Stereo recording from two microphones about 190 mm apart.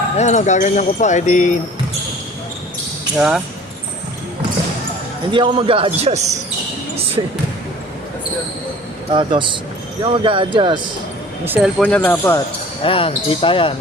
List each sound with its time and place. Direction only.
0.2 s speech: 40° left (ahead or behind)
3.2 s speech: 5° right (ahead or behind)
5.3 s a man's voice: 25° right (ahead or behind)
9.1 s a man's voice: 25° right (ahead or behind)
11.4 s speech: 10° right (ahead or behind)
11.8 s speech: 10° left (ahead or behind)
12.8 s speech: 30° left (ahead or behind)